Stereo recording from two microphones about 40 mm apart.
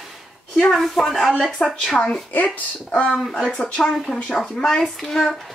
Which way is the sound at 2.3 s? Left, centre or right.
Left.